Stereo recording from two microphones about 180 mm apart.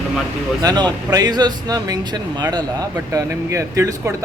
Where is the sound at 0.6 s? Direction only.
20° right (ahead or behind).